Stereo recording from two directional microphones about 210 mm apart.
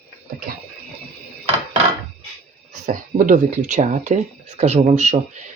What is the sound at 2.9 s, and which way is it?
Speech, 40° right (ahead or behind).